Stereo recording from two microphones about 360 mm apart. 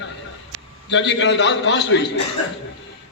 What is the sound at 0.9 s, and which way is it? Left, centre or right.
A man's voice, left.